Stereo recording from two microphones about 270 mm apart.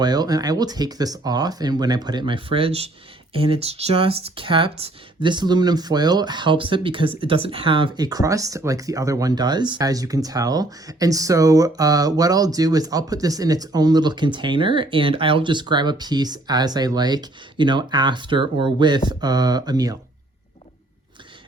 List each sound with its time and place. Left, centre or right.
0.0 s speech: centre